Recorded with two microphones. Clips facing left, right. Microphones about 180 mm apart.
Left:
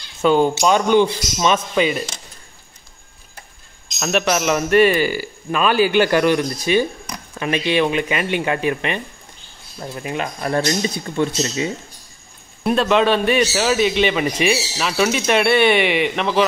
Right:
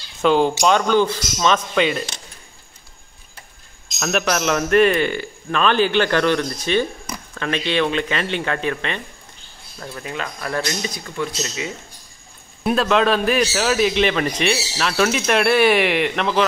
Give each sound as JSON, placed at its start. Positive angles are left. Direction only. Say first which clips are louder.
{"t": 0.2, "sound": "speech", "louder": "left 1 dB", "side_deg": 0}
{"t": 0.7, "sound": "a man's voice", "louder": "left 2 dB", "side_deg": 15}
{"t": 4.0, "sound": "a man's voice", "louder": "left 2 dB", "side_deg": 0}
{"t": 12.6, "sound": "speech", "louder": "left 1 dB", "side_deg": 0}